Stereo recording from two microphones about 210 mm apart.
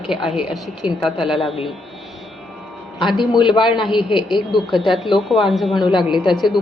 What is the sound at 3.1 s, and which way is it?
A man's voice, 20° left (ahead or behind).